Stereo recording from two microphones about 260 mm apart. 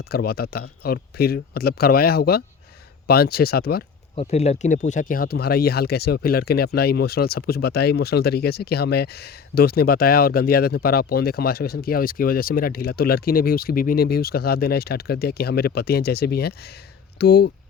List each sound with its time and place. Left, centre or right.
0.0 s speech: left
4.1 s speech: left